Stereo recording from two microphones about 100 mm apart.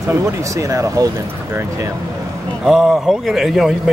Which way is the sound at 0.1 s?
30° right (ahead or behind).